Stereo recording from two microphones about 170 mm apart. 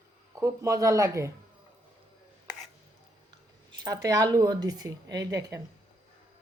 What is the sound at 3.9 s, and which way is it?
Speech, 20° right (ahead or behind).